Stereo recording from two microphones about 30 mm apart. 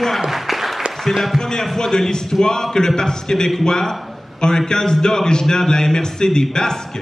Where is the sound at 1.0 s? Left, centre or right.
Centre.